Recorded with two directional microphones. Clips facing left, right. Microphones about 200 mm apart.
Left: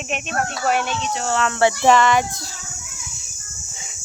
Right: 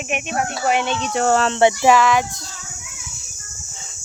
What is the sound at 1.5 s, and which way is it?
Speech, 20° right (ahead or behind).